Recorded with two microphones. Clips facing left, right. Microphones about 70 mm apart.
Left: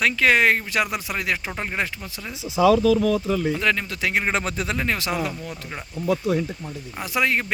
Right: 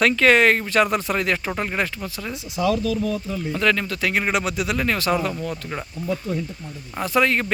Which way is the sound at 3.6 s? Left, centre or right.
Centre.